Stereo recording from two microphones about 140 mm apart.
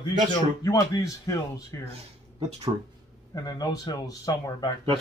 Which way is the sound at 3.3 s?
30° left (ahead or behind).